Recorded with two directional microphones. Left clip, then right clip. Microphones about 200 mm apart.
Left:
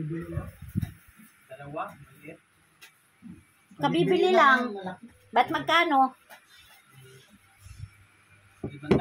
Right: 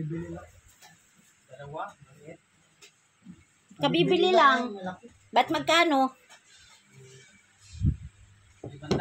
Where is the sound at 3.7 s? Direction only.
30° right (ahead or behind).